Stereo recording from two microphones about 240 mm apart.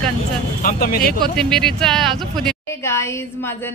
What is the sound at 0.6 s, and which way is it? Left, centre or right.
Speech, left.